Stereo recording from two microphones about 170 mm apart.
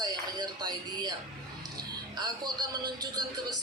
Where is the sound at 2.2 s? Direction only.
25° right (ahead or behind).